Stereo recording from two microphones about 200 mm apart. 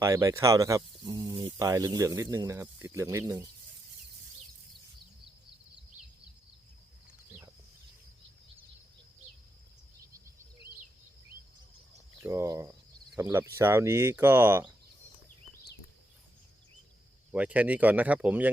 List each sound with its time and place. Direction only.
0.0 s speech: 15° right (ahead or behind)
12.2 s speech: 15° right (ahead or behind)
17.3 s speech: 5° right (ahead or behind)